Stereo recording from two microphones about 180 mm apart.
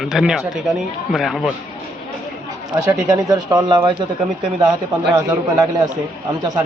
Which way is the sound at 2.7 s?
20° right (ahead or behind).